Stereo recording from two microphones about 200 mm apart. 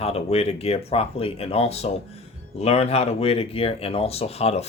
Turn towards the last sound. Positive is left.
turn(degrees=30)  # may be behind; listen again after turning